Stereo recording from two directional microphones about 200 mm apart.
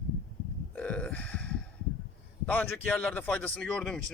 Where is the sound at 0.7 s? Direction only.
5° left (ahead or behind).